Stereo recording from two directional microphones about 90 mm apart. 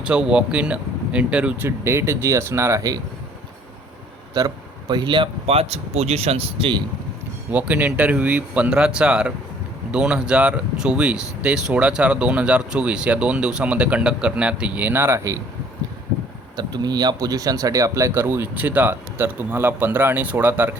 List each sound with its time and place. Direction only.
0.0 s speech: 10° right (ahead or behind)
1.6 s speech: 30° right (ahead or behind)
4.4 s speech: 50° right (ahead or behind); by 5.6 s 65° right (ahead or behind)
6.3 s speech: 90° right
7.5 s speech: 15° right (ahead or behind); by 15.4 s 35° right (ahead or behind)
16.6 s speech: 50° right (ahead or behind); by 20.7 s 20° right (ahead or behind)